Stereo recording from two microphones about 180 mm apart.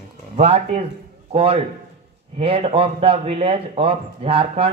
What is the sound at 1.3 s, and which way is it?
A man's voice, 35° right (ahead or behind).